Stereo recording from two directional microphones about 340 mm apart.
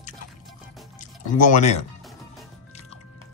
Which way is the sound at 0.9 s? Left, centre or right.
Left.